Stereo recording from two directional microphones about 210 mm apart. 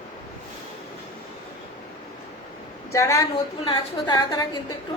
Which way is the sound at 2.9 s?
15° left (ahead or behind).